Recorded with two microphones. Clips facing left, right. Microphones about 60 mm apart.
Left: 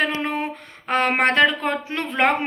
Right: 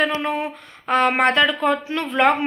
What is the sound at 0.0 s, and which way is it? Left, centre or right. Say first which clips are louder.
A woman's voice: right 2 dB; left.